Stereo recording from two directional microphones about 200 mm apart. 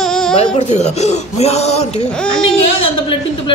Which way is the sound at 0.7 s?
35° left (ahead or behind).